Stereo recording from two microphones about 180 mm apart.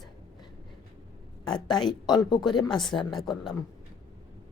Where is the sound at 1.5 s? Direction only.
25° left (ahead or behind).